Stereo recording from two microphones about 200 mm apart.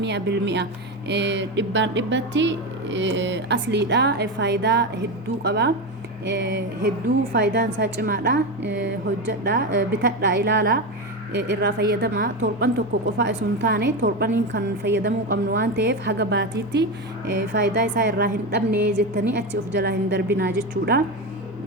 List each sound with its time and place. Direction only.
0.0 s a woman's voice: 60° right (ahead or behind)